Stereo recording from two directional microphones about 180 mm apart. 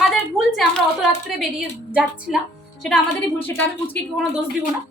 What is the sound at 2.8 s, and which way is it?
A woman's voice, 5° left (ahead or behind).